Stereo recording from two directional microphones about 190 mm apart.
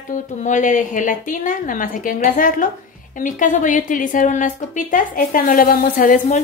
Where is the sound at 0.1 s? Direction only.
40° left (ahead or behind).